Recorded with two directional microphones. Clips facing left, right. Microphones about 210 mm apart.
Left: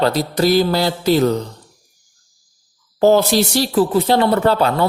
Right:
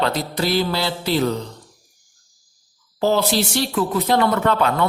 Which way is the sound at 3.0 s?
45° left (ahead or behind).